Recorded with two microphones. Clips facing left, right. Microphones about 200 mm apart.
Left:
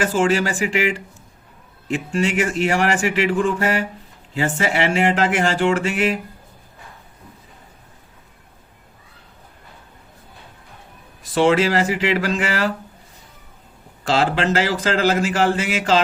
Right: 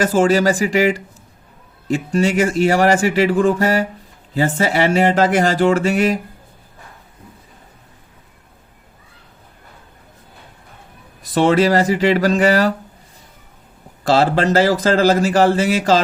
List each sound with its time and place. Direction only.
0.0 s a man's voice: 40° right (ahead or behind)
2.1 s a man's voice: 40° right (ahead or behind)
11.2 s a man's voice: 40° right (ahead or behind)
14.0 s a man's voice: 40° right (ahead or behind)